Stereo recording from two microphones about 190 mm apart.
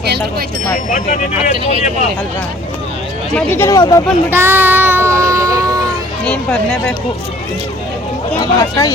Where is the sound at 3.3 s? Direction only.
10° left (ahead or behind).